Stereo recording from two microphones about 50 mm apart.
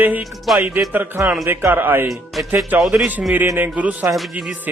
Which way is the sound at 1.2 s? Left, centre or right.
Right.